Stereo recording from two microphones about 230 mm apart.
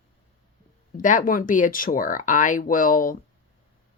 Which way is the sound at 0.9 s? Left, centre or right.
Left.